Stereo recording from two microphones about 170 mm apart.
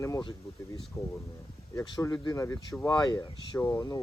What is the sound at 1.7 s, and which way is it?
Speech, 20° left (ahead or behind).